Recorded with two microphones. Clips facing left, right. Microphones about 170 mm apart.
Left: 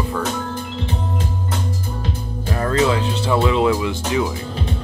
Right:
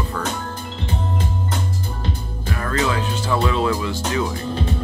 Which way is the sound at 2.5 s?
25° left (ahead or behind).